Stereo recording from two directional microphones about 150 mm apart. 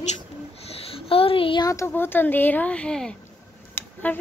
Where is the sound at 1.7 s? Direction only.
15° left (ahead or behind).